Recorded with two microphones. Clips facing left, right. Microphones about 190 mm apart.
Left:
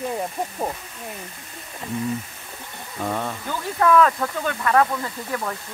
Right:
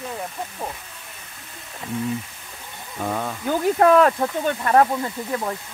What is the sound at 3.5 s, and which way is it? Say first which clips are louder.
Speech: right 3 dB; 50° right (ahead or behind).